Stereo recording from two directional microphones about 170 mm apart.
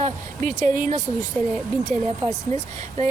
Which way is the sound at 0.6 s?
50° right (ahead or behind).